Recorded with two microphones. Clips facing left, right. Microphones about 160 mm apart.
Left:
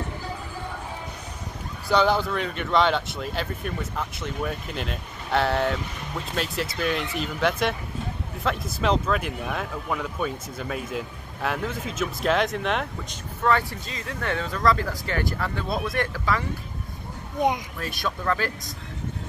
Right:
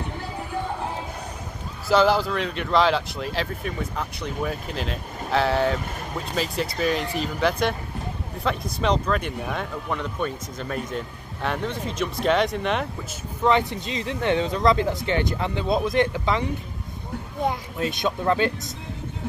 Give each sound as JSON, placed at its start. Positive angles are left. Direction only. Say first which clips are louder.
{"t": 1.9, "sound": "speech", "louder": "right 2 dB", "side_deg": 0}
{"t": 8.7, "sound": "speech", "louder": "even", "side_deg": 5}
{"t": 13.4, "sound": "speech", "louder": "right 3 dB", "side_deg": -20}
{"t": 17.4, "sound": "speech", "louder": "left 2 dB", "side_deg": 20}
{"t": 17.7, "sound": "speech", "louder": "right 5 dB", "side_deg": -20}